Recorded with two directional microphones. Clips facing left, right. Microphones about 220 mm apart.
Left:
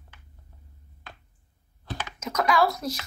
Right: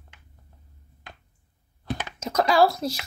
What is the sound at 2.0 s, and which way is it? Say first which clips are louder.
Computer keyboard: right 3 dB; 30° right (ahead or behind).